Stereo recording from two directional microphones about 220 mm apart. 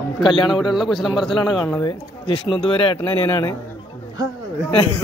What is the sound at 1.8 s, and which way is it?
Speech, 20° left (ahead or behind).